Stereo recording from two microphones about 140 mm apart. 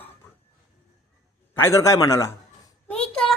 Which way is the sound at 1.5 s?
20° left (ahead or behind).